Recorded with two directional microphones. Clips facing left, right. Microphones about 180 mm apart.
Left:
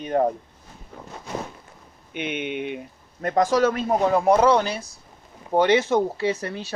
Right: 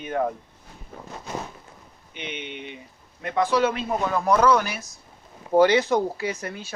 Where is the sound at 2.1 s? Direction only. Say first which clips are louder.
Left 7 dB; 55° left (ahead or behind).